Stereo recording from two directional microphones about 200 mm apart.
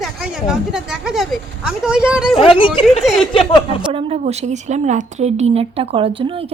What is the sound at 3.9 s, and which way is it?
Speech, 35° right (ahead or behind).